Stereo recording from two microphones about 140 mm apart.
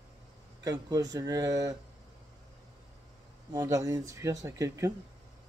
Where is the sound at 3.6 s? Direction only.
20° right (ahead or behind).